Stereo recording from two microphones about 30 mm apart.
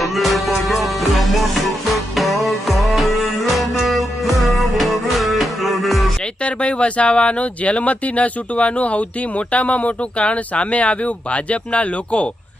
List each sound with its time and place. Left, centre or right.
0.0 s music: centre
6.4 s speech: left